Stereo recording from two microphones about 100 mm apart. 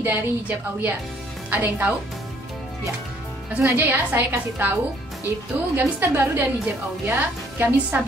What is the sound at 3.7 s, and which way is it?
Speech, 20° right (ahead or behind).